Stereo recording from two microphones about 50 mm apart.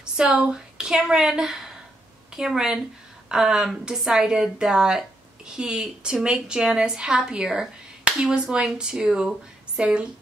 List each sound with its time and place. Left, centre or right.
0.2 s a woman's voice: centre